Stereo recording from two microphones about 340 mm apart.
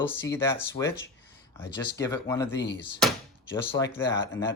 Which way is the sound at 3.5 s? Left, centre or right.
Centre.